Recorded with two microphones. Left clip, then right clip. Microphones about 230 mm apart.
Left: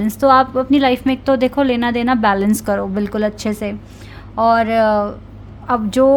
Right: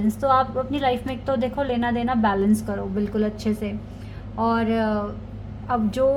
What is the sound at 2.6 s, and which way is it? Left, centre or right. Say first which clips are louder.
A woman's voice: left 9 dB; left.